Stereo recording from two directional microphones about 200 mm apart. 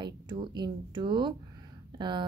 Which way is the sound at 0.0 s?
20° right (ahead or behind).